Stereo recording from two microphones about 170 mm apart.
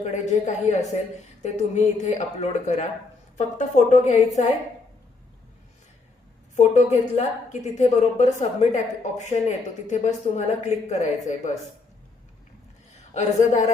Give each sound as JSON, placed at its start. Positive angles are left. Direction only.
{"t": 0.0, "sound": "speech", "side_deg": 45}
{"t": 6.6, "sound": "speech", "side_deg": 45}
{"t": 13.1, "sound": "speech", "side_deg": 45}